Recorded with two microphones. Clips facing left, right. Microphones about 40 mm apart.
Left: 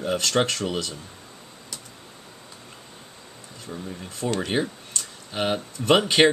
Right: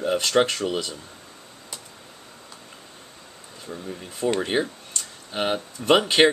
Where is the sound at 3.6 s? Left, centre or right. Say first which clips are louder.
Right 1 dB; centre.